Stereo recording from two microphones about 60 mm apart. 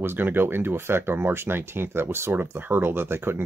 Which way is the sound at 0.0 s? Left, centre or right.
Right.